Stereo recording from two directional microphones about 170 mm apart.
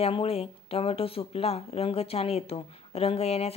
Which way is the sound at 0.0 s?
35° left (ahead or behind).